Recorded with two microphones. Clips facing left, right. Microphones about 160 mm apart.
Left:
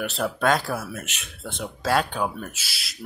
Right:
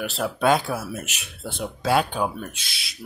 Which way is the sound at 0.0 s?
Centre (ahead or behind).